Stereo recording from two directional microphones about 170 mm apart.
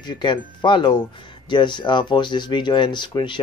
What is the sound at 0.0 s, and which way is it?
Speech, 25° left (ahead or behind).